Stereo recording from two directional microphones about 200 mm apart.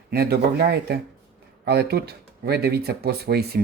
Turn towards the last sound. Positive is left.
turn(degrees=-50)  # may be behind; listen again after turning